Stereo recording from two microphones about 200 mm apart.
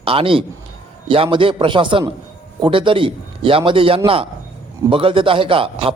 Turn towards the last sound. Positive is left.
turn(degrees=-25)  # may be behind; listen again after turning